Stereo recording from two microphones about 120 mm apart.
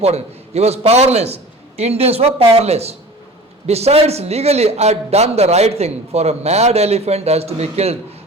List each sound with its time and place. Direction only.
0.0 s a man's voice: 60° right (ahead or behind)